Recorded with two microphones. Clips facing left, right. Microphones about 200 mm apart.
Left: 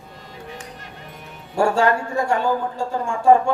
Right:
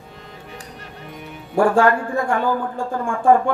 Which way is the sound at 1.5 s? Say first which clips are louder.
Right 2 dB; 55° right (ahead or behind).